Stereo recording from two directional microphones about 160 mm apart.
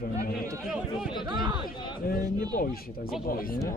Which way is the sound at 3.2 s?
65° left (ahead or behind).